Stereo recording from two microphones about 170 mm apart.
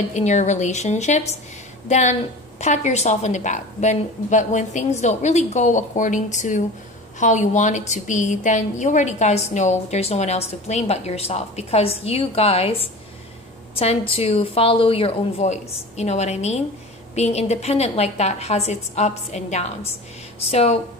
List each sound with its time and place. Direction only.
0.1 s a woman's voice: 45° left (ahead or behind)